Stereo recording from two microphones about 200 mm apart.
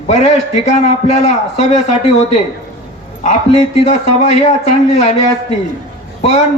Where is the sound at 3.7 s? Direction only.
30° left (ahead or behind).